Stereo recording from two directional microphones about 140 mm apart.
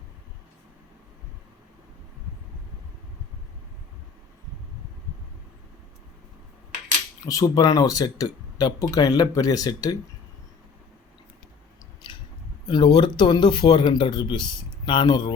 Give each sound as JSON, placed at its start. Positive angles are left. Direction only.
{"t": 7.3, "sound": "speech", "side_deg": 25}
{"t": 12.1, "sound": "a sound", "side_deg": 35}
{"t": 12.6, "sound": "speech", "side_deg": 30}